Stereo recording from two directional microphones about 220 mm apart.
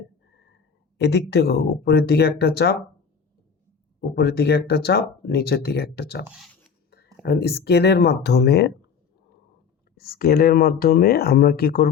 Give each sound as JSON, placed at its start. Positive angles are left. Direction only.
{"t": 0.9, "sound": "speech", "side_deg": 50}
{"t": 4.0, "sound": "speech", "side_deg": 45}
{"t": 6.2, "sound": "speech", "side_deg": 0}
{"t": 6.9, "sound": "speech", "side_deg": 45}
{"t": 10.0, "sound": "speech", "side_deg": 45}